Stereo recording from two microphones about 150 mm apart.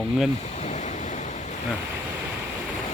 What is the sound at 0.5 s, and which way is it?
Waves, 50° left (ahead or behind).